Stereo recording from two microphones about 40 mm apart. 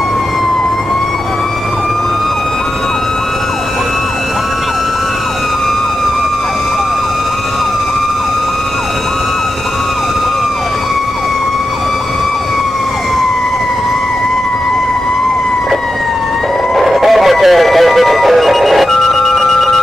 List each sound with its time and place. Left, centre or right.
16.7 s music: centre
18.9 s telephone: centre